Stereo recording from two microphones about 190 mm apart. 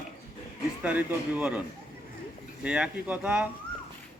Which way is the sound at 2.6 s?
5° right (ahead or behind).